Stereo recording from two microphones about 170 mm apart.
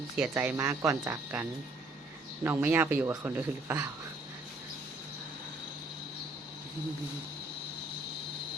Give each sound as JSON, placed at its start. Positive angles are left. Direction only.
{"t": 0.3, "sound": "speech", "side_deg": -15}